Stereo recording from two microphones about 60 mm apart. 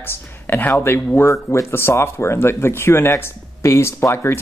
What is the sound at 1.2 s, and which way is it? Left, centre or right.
Speech, left.